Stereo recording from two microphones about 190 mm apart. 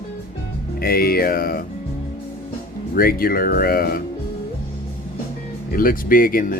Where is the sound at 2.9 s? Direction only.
50° left (ahead or behind).